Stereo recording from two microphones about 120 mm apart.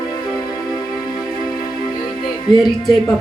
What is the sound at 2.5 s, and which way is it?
Speech, 35° left (ahead or behind).